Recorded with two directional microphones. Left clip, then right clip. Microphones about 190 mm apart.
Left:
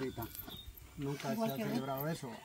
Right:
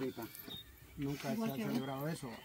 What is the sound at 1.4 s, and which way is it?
Speech, 5° left (ahead or behind).